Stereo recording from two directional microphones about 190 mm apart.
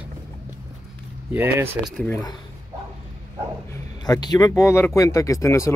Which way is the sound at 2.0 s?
20° left (ahead or behind).